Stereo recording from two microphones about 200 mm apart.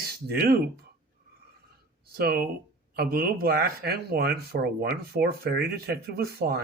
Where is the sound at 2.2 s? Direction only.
50° right (ahead or behind).